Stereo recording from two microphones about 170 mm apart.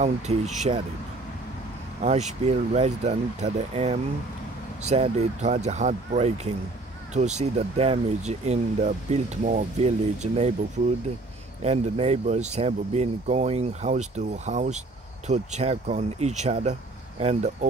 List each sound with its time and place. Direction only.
0.0 s speech: 40° right (ahead or behind)
2.0 s speech: 45° right (ahead or behind)
11.6 s speech: 40° right (ahead or behind)